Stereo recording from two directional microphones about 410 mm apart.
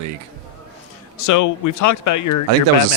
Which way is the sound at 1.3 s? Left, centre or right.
Left.